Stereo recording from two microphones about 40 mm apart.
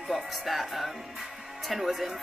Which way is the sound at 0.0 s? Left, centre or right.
Centre.